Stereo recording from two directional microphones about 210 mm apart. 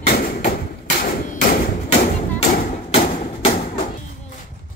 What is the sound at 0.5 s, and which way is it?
Bouncing, 40° left (ahead or behind).